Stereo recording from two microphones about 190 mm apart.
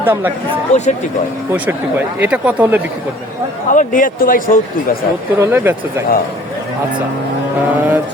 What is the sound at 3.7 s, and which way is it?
Speech, 45° left (ahead or behind).